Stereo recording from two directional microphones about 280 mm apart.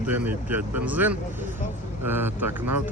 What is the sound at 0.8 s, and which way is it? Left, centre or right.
Speech, centre.